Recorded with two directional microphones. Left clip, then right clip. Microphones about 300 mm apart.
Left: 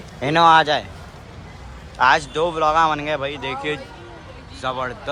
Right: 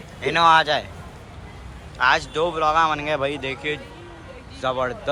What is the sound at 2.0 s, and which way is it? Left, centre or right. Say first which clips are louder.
Speech: left 3 dB; centre.